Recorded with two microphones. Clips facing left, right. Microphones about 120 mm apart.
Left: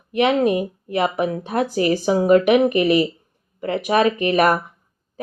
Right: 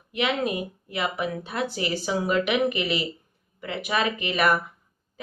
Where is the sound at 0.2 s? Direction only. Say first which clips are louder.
Left 9 dB; 40° left (ahead or behind).